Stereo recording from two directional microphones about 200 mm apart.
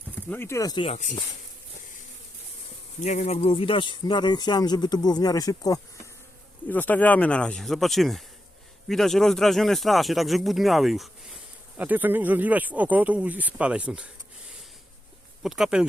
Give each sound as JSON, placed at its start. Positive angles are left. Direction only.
{"t": 0.3, "sound": "speech", "side_deg": 10}
{"t": 0.9, "sound": "speech", "side_deg": 35}
{"t": 3.0, "sound": "speech", "side_deg": 35}
{"t": 15.4, "sound": "speech", "side_deg": 0}